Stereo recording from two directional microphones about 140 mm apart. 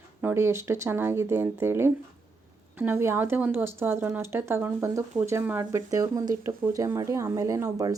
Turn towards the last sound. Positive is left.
turn(degrees=-25)  # may be behind; listen again after turning